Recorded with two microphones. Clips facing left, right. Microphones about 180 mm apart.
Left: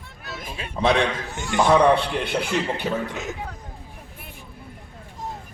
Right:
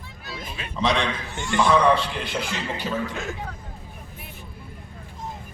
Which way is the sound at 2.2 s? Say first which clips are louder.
Left 5 dB; 60° left (ahead or behind).